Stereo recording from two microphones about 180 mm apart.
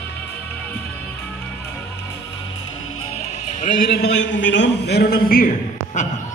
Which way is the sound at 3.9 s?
75° left (ahead or behind).